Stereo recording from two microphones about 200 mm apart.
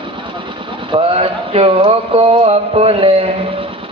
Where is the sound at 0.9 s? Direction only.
30° right (ahead or behind).